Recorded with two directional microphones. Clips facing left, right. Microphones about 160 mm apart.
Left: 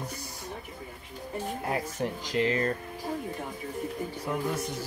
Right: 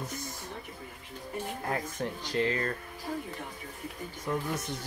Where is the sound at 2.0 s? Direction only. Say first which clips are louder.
Left 2 dB; 20° left (ahead or behind).